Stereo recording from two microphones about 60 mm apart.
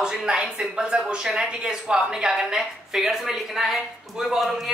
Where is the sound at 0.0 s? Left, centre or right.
Centre.